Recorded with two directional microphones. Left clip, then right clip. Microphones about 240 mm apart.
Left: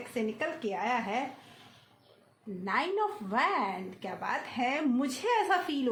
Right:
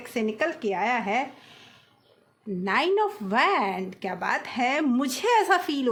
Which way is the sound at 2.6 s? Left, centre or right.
Right.